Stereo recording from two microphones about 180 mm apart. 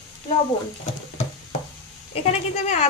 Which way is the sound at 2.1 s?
35° left (ahead or behind).